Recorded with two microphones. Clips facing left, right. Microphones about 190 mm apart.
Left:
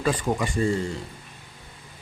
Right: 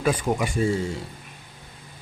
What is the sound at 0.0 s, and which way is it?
Speech, 5° right (ahead or behind).